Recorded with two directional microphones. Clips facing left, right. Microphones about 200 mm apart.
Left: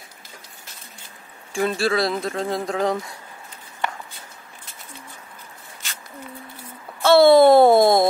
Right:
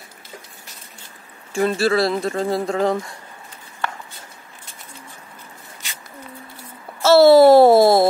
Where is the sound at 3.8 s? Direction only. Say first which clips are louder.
Even; 15° left (ahead or behind).